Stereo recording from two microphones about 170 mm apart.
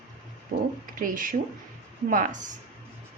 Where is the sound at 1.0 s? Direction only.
55° right (ahead or behind).